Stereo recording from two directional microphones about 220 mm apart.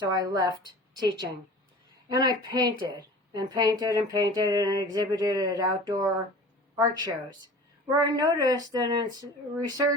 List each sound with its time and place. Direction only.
0.0 s a woman's voice: 20° right (ahead or behind)